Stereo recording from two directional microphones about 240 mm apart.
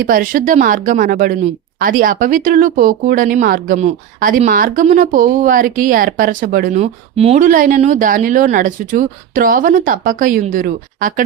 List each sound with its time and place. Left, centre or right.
0.0 s speech: right